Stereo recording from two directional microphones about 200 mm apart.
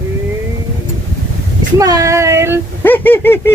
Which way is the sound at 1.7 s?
15° right (ahead or behind).